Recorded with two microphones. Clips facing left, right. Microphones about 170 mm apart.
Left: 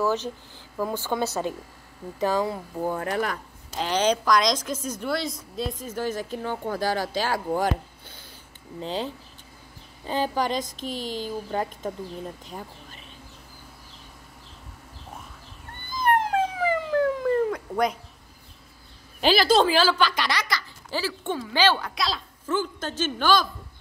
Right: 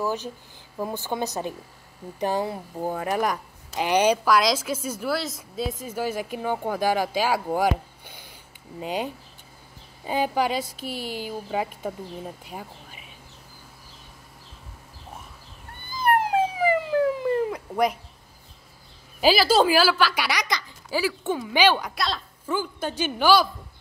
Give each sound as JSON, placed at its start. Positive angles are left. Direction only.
{"t": 0.0, "sound": "a woman's voice", "side_deg": -10}
{"t": 15.9, "sound": "police car", "side_deg": -10}
{"t": 19.2, "sound": "a woman's voice", "side_deg": -5}
{"t": 21.9, "sound": "a woman's voice", "side_deg": 0}
{"t": 22.5, "sound": "a woman's voice", "side_deg": -10}